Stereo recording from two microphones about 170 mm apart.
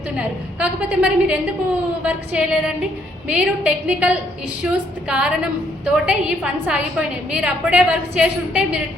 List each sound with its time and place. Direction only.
0.2 s a woman's voice: 10° right (ahead or behind)